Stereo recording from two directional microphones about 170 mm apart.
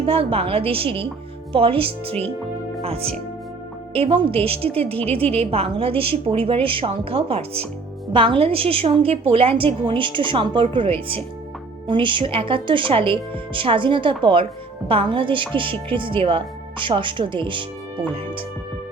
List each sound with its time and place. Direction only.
0.0 s a woman's voice: 35° right (ahead or behind)